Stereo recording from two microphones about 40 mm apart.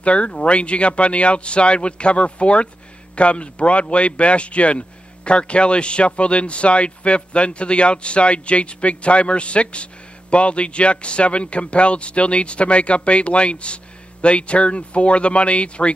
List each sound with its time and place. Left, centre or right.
0.0 s a man's voice: left